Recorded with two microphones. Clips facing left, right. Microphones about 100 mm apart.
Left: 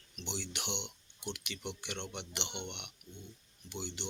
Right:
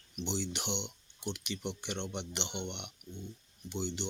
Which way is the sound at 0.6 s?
15° left (ahead or behind).